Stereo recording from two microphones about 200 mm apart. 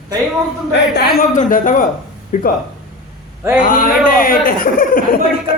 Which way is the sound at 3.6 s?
45° left (ahead or behind).